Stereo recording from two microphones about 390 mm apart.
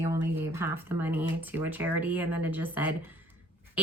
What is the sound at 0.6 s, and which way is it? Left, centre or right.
A woman's voice, centre.